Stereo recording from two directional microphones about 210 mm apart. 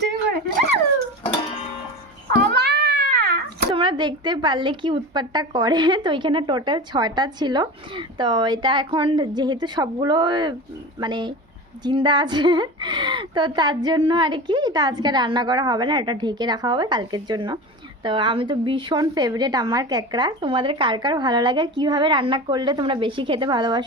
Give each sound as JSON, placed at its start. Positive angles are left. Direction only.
{"t": 0.1, "sound": "a sound", "side_deg": -50}
{"t": 1.2, "sound": "music", "side_deg": 30}
{"t": 2.5, "sound": "cat", "side_deg": -50}
{"t": 3.8, "sound": "a woman's voice", "side_deg": -20}